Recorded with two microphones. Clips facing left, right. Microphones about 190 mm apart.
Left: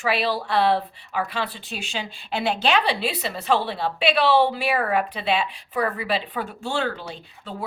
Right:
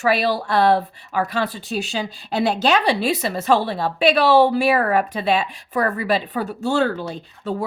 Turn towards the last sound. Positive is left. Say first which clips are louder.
# right 8 dB
turn(degrees=-45)  # may be behind; listen again after turning